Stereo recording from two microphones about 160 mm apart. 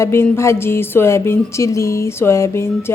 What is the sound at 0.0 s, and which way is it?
Speech, 15° left (ahead or behind).